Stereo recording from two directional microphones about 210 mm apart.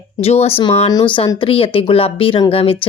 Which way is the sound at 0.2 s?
30° left (ahead or behind).